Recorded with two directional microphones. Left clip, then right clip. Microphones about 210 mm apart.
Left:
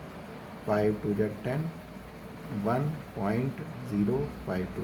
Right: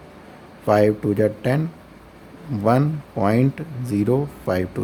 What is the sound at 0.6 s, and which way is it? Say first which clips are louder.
Speech: right 11 dB; 60° right (ahead or behind).